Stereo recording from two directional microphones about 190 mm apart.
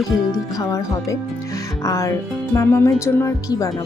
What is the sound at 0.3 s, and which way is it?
A woman's voice, 15° left (ahead or behind).